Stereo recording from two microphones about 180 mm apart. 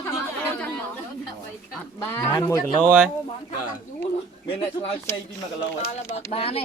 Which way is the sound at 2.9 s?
10° right (ahead or behind).